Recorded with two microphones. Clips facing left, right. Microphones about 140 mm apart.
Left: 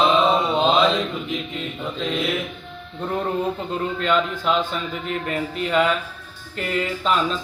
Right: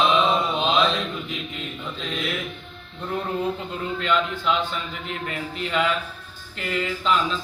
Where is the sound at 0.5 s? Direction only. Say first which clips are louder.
Left 5 dB; 40° left (ahead or behind).